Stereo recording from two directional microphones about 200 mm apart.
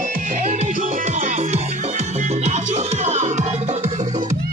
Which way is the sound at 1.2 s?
35° right (ahead or behind).